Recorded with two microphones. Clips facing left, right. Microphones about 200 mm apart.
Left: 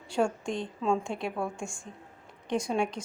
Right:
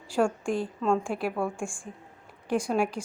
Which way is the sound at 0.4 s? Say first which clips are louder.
Right 3 dB; 5° right (ahead or behind).